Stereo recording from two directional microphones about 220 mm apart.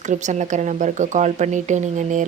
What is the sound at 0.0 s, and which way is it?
Speech, 35° right (ahead or behind).